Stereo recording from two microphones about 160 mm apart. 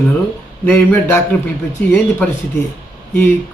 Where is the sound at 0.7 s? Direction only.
15° left (ahead or behind).